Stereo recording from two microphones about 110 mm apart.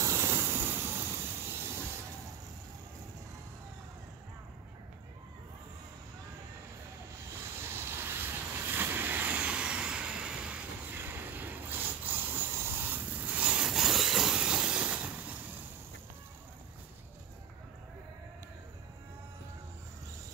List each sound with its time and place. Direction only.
0.0 s vehicle: 25° right (ahead or behind)
7.6 s vehicle: 20° right (ahead or behind)